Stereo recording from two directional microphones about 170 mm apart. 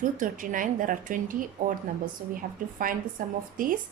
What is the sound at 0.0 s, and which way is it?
A woman's voice, 50° right (ahead or behind).